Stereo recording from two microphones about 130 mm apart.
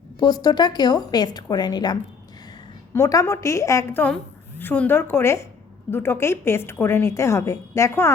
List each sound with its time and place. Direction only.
0.2 s a woman's voice: 30° left (ahead or behind)